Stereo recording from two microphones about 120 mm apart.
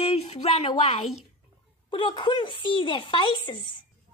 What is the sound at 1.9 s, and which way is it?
Speech, 45° left (ahead or behind).